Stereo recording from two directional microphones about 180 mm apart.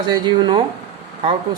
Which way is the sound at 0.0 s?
25° right (ahead or behind).